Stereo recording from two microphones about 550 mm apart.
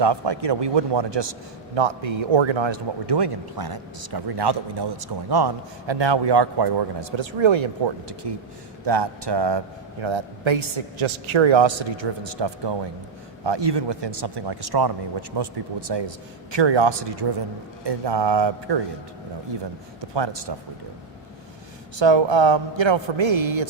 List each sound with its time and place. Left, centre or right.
0.0 s a man's voice: right
20.0 s a man's voice: right
21.9 s a man's voice: right